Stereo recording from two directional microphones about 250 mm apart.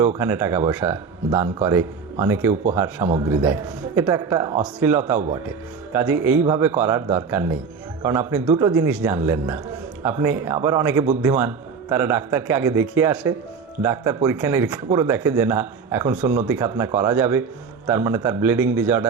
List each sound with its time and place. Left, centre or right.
0.2 s speech: centre